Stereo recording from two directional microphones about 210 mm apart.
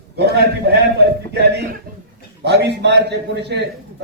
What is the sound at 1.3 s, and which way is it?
A man's voice, 50° right (ahead or behind).